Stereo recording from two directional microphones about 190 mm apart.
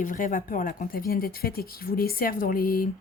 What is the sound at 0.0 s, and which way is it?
Speech, 45° left (ahead or behind).